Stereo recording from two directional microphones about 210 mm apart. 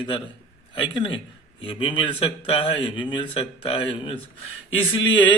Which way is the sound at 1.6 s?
25° left (ahead or behind).